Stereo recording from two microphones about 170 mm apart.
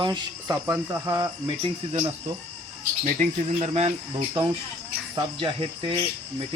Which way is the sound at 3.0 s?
45° right (ahead or behind).